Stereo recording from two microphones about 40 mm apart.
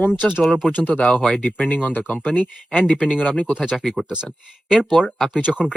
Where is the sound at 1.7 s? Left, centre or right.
Left.